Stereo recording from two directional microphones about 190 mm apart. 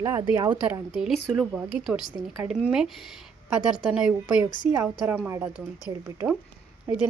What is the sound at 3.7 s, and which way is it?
A woman's voice, 5° right (ahead or behind).